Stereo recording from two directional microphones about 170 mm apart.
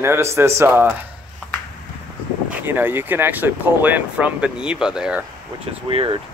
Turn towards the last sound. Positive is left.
turn(degrees=-30)  # may be behind; listen again after turning